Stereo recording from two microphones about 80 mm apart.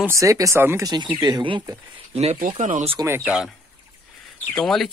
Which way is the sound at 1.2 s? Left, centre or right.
Right.